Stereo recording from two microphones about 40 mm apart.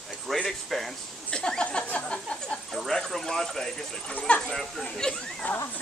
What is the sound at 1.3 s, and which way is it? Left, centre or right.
Speech, left.